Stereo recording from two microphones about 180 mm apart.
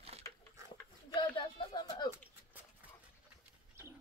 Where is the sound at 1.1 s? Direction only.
30° left (ahead or behind).